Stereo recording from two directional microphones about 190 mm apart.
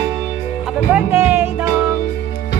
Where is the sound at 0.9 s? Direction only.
10° right (ahead or behind).